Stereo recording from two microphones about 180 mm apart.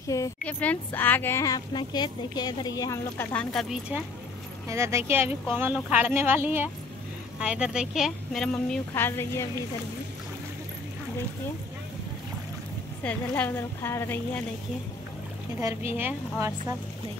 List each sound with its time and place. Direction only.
0.1 s a woman's voice: 15° left (ahead or behind)
4.6 s a woman's voice: 15° right (ahead or behind); by 9.5 s 15° left (ahead or behind)
13.0 s a woman's voice: 10° left (ahead or behind)
15.6 s speech: 15° right (ahead or behind)